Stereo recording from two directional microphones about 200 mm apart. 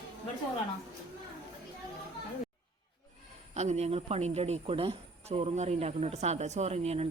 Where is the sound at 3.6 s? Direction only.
35° right (ahead or behind).